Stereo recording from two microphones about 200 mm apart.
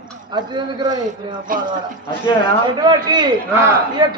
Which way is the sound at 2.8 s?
20° right (ahead or behind).